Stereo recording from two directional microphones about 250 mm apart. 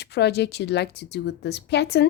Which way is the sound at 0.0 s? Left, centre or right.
Left.